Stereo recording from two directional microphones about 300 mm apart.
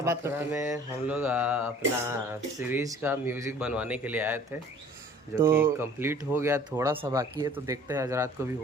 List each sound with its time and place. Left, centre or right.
0.0 s speech: centre
5.4 s speech: centre